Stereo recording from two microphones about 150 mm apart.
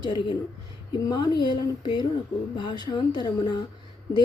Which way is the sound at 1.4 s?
30° left (ahead or behind).